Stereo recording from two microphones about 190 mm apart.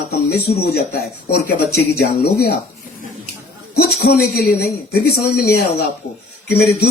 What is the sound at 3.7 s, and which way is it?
Speech, 60° left (ahead or behind).